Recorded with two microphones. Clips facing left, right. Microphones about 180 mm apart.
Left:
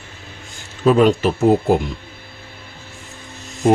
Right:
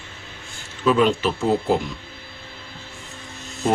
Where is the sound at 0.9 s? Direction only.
45° left (ahead or behind).